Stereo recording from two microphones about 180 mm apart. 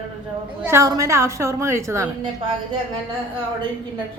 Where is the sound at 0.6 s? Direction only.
15° right (ahead or behind).